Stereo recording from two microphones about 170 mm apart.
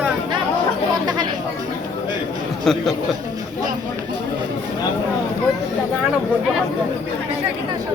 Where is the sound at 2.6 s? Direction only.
Centre (ahead or behind).